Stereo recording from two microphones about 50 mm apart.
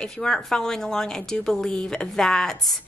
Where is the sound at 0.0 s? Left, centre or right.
Centre.